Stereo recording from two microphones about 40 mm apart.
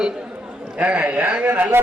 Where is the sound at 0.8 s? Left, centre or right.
Right.